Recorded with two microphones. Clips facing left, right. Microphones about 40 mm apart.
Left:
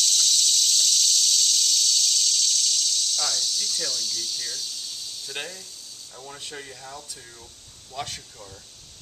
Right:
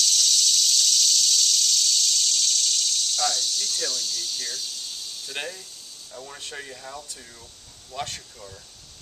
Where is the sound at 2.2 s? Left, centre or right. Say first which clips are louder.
Even; centre.